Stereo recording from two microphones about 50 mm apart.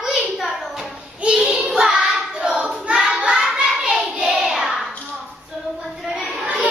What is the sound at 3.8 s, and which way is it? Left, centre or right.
Child singing, right.